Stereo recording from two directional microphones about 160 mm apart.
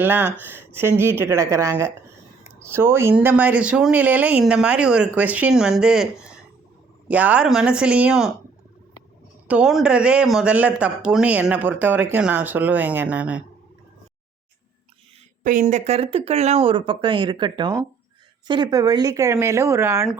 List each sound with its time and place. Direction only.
0.0 s speech: 10° right (ahead or behind)
7.1 s speech: 10° right (ahead or behind)
9.5 s speech: 5° right (ahead or behind)
15.6 s speech: 45° right (ahead or behind); by 20.1 s 15° right (ahead or behind)